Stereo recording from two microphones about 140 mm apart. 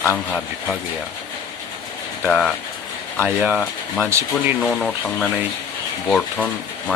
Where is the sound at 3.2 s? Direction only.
10° right (ahead or behind).